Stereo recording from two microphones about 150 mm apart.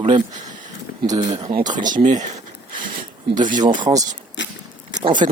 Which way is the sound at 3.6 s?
25° right (ahead or behind).